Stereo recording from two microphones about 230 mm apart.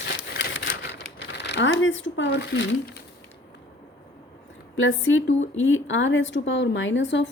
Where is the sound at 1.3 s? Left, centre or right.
Left.